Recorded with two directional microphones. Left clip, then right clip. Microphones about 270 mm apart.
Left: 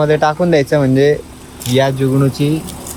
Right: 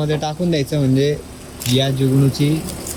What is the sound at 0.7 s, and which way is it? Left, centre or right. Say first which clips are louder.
Speech: left 7 dB; centre.